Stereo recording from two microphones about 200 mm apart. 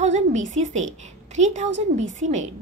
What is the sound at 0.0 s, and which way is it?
A woman's voice, 35° right (ahead or behind).